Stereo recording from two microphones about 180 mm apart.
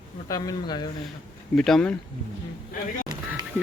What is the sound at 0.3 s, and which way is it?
Speech, 20° left (ahead or behind).